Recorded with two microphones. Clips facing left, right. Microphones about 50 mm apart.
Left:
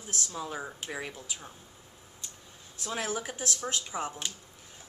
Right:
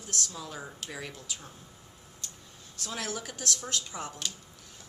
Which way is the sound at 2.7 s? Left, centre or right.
Centre.